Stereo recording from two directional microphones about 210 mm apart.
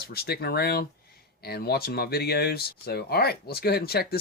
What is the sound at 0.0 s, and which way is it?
Speech, 45° left (ahead or behind).